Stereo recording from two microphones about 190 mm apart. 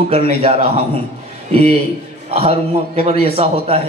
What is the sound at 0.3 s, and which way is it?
A man's voice, 30° right (ahead or behind).